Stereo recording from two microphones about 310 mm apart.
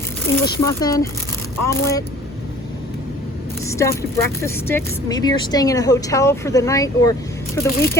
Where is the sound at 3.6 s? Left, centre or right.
Centre.